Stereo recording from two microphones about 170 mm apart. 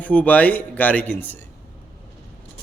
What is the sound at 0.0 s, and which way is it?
A man's voice, 10° left (ahead or behind).